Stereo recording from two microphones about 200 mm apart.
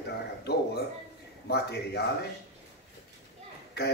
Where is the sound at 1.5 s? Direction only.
55° left (ahead or behind).